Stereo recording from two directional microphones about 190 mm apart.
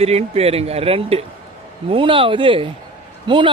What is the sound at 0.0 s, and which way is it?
Speech, 35° right (ahead or behind).